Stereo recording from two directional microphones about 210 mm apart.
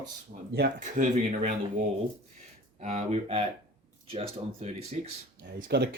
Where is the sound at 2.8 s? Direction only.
30° right (ahead or behind).